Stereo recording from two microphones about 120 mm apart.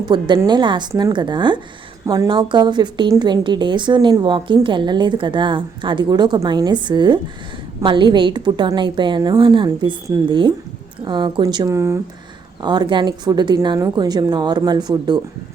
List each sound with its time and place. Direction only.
0.0 s a woman's voice: 40° right (ahead or behind)
11.4 s speech: 30° right (ahead or behind)
12.6 s a woman's voice: 40° right (ahead or behind)